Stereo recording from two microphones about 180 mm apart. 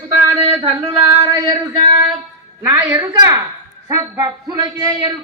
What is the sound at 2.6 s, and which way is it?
A woman's voice, 15° right (ahead or behind).